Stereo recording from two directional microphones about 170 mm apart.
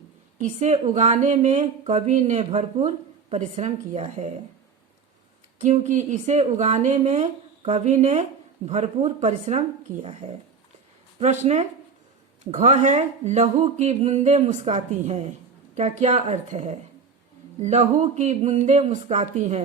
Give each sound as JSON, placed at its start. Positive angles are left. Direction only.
{"t": 0.3, "sound": "speech", "side_deg": -45}
{"t": 5.5, "sound": "speech", "side_deg": -45}